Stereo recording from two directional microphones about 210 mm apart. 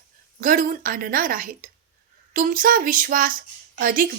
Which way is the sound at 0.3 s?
40° right (ahead or behind).